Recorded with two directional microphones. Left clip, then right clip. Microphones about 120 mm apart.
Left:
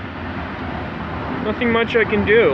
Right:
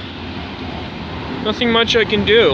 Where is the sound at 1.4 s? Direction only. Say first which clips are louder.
Right 3 dB; 40° right (ahead or behind).